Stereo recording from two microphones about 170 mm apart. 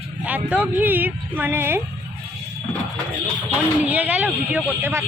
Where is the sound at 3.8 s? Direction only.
10° right (ahead or behind).